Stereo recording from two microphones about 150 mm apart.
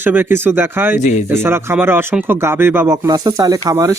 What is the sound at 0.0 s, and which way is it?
Speech, 15° right (ahead or behind).